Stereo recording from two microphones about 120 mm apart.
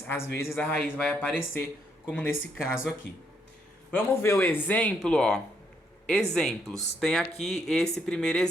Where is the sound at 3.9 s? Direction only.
20° left (ahead or behind).